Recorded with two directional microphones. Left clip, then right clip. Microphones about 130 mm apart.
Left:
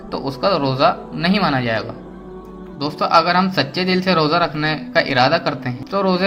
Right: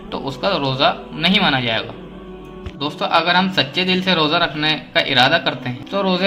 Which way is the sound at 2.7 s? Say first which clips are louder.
Left 3 dB; 50° left (ahead or behind).